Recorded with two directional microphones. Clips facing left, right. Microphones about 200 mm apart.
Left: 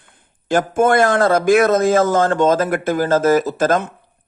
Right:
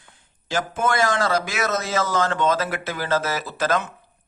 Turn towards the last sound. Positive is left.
turn(degrees=50)  # may be behind; listen again after turning